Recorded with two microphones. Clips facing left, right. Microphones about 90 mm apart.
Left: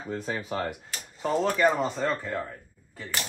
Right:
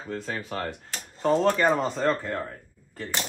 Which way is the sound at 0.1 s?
15° left (ahead or behind).